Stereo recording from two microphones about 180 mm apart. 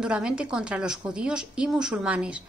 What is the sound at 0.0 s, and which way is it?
A woman's voice, 5° right (ahead or behind).